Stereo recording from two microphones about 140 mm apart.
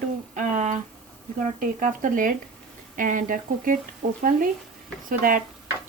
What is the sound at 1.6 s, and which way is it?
A woman's voice, 70° right (ahead or behind).